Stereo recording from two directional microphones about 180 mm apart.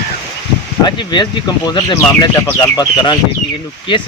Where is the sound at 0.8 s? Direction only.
25° left (ahead or behind).